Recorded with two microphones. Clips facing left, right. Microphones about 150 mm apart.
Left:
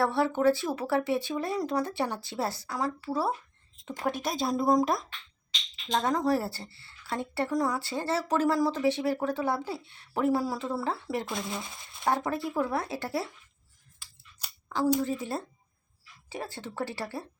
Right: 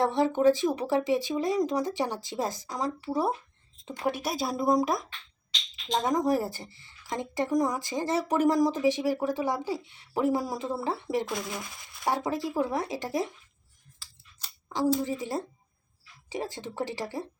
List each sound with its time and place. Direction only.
0.0 s speech: 15° right (ahead or behind)
4.0 s speech: 5° right (ahead or behind)
5.9 s speech: 15° right (ahead or behind)
11.3 s speech: 25° left (ahead or behind)
12.0 s speech: 15° right (ahead or behind)
14.0 s scissors: 10° left (ahead or behind)
15.0 s speech: 15° right (ahead or behind)